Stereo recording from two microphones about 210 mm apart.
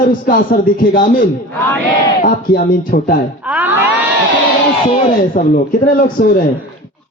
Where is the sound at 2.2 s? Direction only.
40° left (ahead or behind).